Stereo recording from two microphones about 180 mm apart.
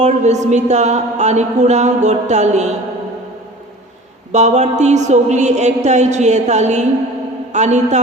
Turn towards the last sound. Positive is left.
turn(degrees=-40)  # may be behind; listen again after turning